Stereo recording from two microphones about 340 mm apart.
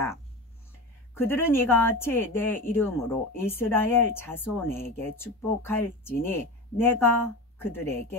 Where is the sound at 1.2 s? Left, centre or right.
Centre.